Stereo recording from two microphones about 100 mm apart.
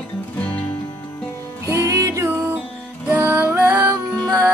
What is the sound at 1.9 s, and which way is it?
Music, 30° right (ahead or behind).